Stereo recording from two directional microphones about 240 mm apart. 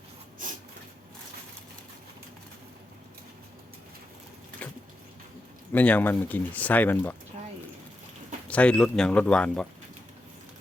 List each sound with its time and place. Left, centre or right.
4.6 s a sound: centre
5.7 s speech: centre
8.4 s speech: centre